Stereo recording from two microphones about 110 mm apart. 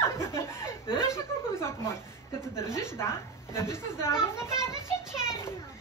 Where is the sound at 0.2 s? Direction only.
25° left (ahead or behind).